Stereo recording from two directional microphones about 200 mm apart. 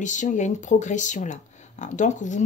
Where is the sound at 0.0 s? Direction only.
40° left (ahead or behind).